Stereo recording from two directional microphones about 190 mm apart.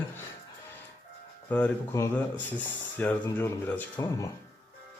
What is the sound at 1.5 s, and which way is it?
Speech, 10° left (ahead or behind).